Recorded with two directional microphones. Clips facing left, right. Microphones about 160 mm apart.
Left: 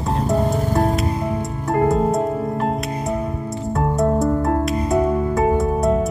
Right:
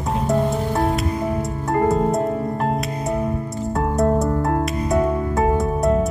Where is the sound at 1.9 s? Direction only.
Centre (ahead or behind).